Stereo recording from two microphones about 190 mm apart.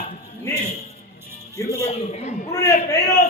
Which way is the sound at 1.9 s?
35° left (ahead or behind).